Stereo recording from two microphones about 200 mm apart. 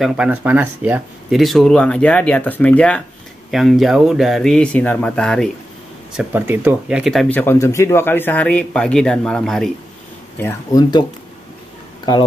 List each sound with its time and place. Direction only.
0.0 s speech: 5° right (ahead or behind)
6.1 s speech: 10° right (ahead or behind)
10.4 s speech: 20° left (ahead or behind)